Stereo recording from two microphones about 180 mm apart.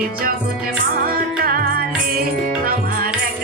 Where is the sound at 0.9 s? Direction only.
55° right (ahead or behind).